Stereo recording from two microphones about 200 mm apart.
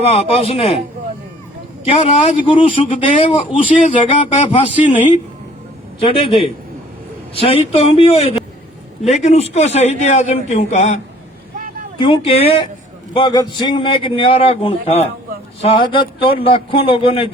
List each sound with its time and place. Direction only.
0.0 s a man's voice: 30° left (ahead or behind)
1.8 s a man's voice: 30° left (ahead or behind)